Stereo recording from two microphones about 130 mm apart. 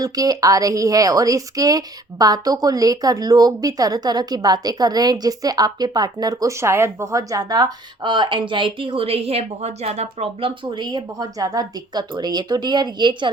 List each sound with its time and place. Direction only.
0.0 s a woman's voice: 30° right (ahead or behind)